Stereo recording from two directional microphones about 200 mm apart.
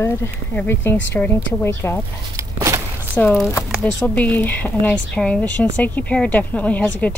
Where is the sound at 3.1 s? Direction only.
5° left (ahead or behind).